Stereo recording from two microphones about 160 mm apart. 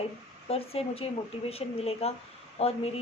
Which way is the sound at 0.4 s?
40° left (ahead or behind).